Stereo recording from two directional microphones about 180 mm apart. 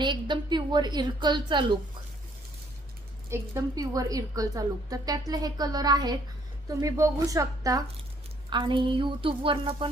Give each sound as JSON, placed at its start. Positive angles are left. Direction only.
{"t": 0.0, "sound": "a woman's voice", "side_deg": -25}
{"t": 3.2, "sound": "a woman's voice", "side_deg": -15}